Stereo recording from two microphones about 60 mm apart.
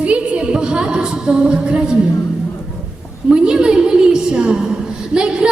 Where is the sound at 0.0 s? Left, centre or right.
Centre.